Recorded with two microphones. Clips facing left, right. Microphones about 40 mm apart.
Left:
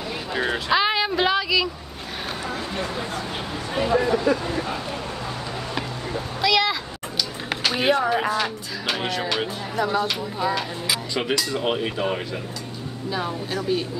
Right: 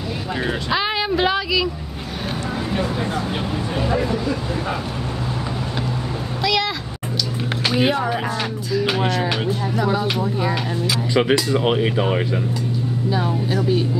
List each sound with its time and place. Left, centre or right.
0.3 s speech: centre
2.7 s speech: centre
3.7 s speech: centre
6.4 s speech: centre
7.7 s speech: centre; by 12.2 s right
13.1 s speech: centre